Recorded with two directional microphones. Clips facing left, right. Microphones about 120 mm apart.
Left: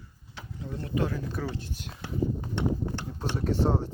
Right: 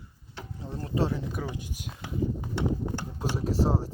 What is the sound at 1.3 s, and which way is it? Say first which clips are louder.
Speech: left 1 dB; 10° right (ahead or behind).